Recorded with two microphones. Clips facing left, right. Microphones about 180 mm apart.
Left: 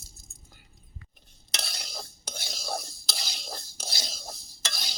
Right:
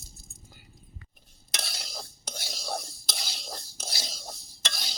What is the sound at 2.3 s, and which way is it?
Whispering, 10° right (ahead or behind).